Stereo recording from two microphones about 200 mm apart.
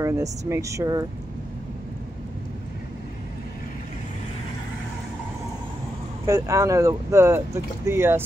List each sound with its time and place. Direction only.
0.0 s speech: 15° right (ahead or behind)
6.2 s speech: 15° right (ahead or behind)